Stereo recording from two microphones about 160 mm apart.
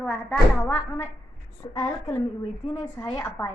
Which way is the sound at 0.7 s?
15° left (ahead or behind).